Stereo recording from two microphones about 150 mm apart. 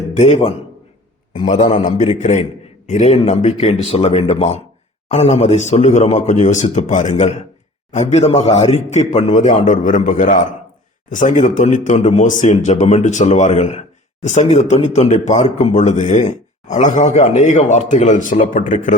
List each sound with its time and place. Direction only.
0.2 s speech: 50° left (ahead or behind)
1.7 s a man's voice: 60° left (ahead or behind)